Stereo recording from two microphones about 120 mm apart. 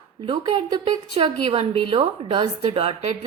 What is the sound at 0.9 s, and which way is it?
A woman's voice, 55° right (ahead or behind).